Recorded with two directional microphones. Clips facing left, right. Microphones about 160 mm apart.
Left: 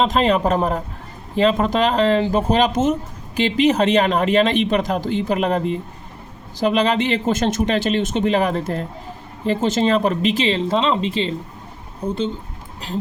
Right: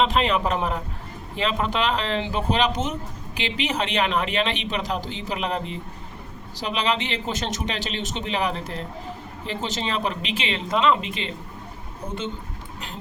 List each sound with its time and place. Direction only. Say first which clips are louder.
0.0 s speech: left 4 dB; 40° left (ahead or behind)